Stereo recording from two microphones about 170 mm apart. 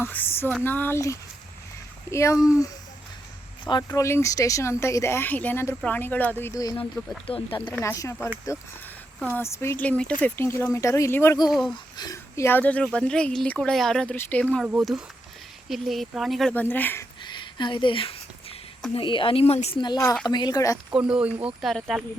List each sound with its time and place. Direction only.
0.0 s speech: 10° left (ahead or behind)
3.6 s speech: 25° left (ahead or behind)
7.3 s speech: 30° left (ahead or behind)
7.6 s speech: 15° left (ahead or behind)
11.4 s speech: centre (ahead or behind)
11.9 s speech: 20° left (ahead or behind)
17.2 s a sound: 25° left (ahead or behind)
18.9 s a woman's voice: 30° left (ahead or behind)
20.9 s speech: 5° right (ahead or behind)